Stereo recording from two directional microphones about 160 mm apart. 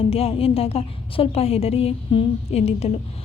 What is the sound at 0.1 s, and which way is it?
A woman's voice, 40° left (ahead or behind).